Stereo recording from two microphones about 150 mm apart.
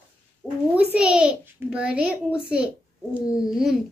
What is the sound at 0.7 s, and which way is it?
A child's voice, 5° right (ahead or behind).